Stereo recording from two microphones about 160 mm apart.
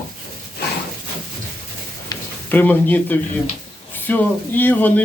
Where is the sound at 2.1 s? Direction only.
25° left (ahead or behind).